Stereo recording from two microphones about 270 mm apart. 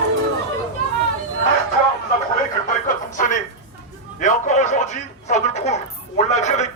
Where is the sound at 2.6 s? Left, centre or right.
Left.